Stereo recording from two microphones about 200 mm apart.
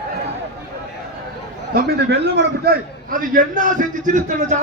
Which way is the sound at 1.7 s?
50° right (ahead or behind).